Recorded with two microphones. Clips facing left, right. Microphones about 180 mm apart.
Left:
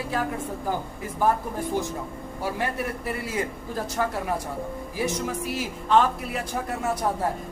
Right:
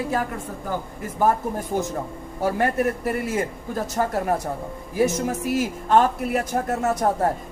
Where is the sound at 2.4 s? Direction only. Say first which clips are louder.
Right 7 dB; 45° right (ahead or behind).